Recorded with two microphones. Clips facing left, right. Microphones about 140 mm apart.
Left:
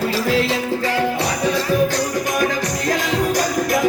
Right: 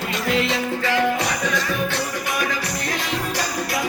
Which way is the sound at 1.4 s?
35° left (ahead or behind).